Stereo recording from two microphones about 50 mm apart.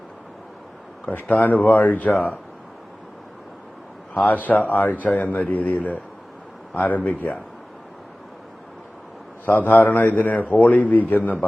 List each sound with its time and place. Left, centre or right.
1.0 s a man's voice: left
4.1 s a man's voice: left
9.5 s a man's voice: left